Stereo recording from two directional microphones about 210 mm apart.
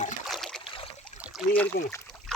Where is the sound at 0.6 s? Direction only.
25° left (ahead or behind).